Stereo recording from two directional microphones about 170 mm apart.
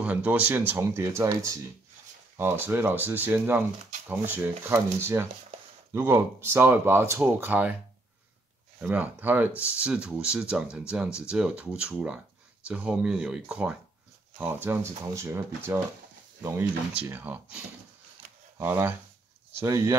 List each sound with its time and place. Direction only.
0.0 s speech: 10° right (ahead or behind)
8.7 s speech: 10° right (ahead or behind)
18.6 s speech: 10° right (ahead or behind)